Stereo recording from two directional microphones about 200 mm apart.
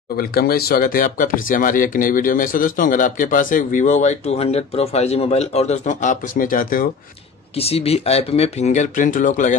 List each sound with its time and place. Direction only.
0.2 s speech: 50° left (ahead or behind)
7.5 s speech: 30° left (ahead or behind)